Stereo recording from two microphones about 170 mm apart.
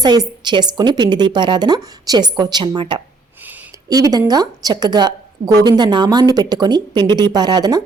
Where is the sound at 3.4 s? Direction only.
10° right (ahead or behind).